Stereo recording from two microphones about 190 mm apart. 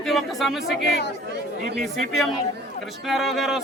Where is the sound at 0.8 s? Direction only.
60° left (ahead or behind).